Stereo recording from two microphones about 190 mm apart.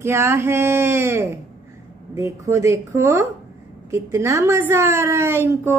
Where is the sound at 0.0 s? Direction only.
15° right (ahead or behind).